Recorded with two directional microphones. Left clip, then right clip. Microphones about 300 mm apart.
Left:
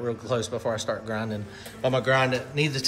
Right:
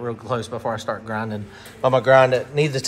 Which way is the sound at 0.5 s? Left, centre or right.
Right.